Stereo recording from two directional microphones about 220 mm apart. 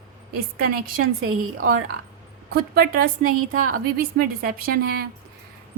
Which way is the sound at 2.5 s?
45° right (ahead or behind).